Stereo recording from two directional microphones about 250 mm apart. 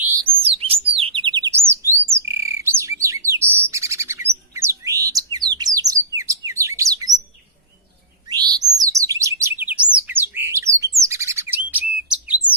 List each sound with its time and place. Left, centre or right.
0.6 s chirp: right
2.1 s bird: centre
7.1 s bird: centre
8.3 s chirp: centre
11.1 s bird: centre